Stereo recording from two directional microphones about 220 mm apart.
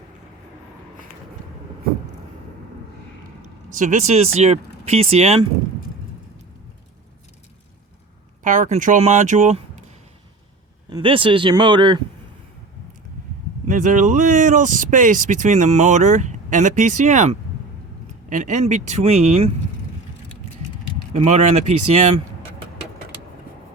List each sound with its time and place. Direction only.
3.7 s speech: 35° right (ahead or behind)
8.4 s speech: 35° right (ahead or behind)
10.8 s speech: 20° right (ahead or behind)
13.7 s speech: 35° right (ahead or behind)
21.1 s speech: 30° right (ahead or behind)